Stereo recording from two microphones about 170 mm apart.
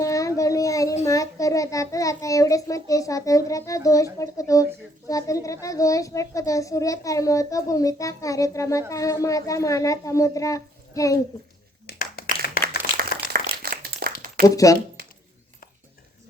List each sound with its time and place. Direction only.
0.0 s child singing: 20° left (ahead or behind)
1.0 s a child's voice: 20° left (ahead or behind)
11.9 s clapping: 65° left (ahead or behind)
13.0 s a sound: 55° right (ahead or behind)
14.4 s speech: 20° left (ahead or behind)